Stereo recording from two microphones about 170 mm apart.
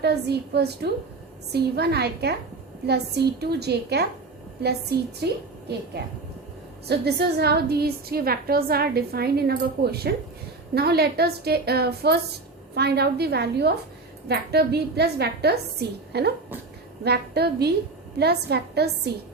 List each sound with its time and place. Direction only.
0.0 s a woman's voice: 75° right (ahead or behind)